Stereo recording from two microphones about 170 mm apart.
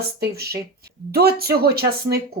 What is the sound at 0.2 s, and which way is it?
Speech, 65° right (ahead or behind).